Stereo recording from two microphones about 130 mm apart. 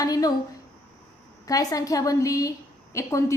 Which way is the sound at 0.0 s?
30° left (ahead or behind).